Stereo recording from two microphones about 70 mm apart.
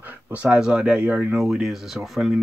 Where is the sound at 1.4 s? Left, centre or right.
Centre.